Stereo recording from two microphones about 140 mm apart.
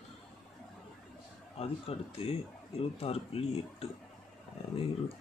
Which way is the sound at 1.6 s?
45° left (ahead or behind).